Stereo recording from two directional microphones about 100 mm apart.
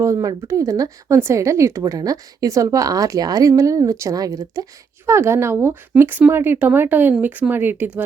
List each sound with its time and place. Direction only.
0.0 s speech: 30° right (ahead or behind)
5.0 s speech: 25° right (ahead or behind)